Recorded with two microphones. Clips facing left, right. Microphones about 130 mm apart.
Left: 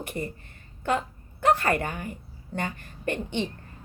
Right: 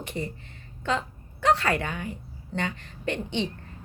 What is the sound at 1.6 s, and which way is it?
A woman's voice, 45° left (ahead or behind).